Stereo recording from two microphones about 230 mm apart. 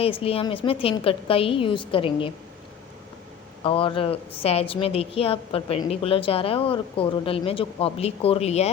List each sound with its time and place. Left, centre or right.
0.0 s a woman's voice: left
3.6 s a woman's voice: left